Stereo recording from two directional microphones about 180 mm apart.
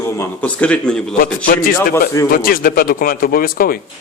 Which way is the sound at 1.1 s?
50° left (ahead or behind).